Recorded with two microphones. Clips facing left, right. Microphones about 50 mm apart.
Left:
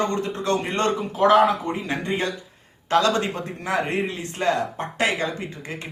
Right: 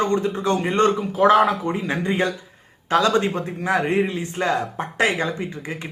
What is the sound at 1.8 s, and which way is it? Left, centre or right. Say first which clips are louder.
A man's voice: right 4 dB; right.